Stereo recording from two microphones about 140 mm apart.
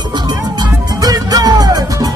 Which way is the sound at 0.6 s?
25° right (ahead or behind).